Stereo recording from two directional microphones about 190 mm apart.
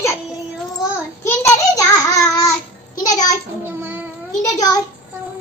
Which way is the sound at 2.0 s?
15° left (ahead or behind).